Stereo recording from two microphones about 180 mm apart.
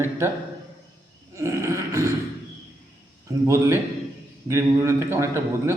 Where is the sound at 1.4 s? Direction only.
15° right (ahead or behind).